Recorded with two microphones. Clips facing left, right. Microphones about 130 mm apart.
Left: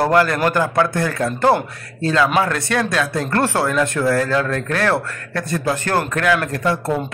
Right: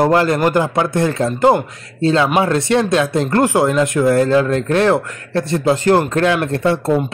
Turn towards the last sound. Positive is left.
turn(degrees=-25)  # may be behind; listen again after turning